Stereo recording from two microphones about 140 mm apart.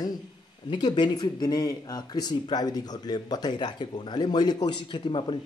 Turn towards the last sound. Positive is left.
turn(degrees=35)  # may be behind; listen again after turning